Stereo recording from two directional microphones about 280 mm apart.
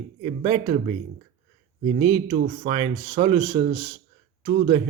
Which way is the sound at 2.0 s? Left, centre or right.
Centre.